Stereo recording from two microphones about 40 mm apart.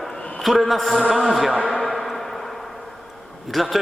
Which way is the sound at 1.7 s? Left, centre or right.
Centre.